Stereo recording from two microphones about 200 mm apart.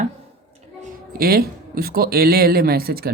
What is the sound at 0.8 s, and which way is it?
Speech, 50° right (ahead or behind).